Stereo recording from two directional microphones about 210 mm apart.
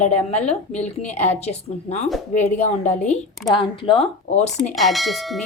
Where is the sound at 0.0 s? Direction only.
30° left (ahead or behind).